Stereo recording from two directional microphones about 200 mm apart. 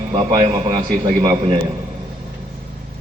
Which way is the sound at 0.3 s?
25° right (ahead or behind).